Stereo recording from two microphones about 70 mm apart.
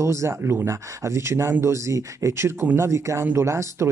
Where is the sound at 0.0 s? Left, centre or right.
Right.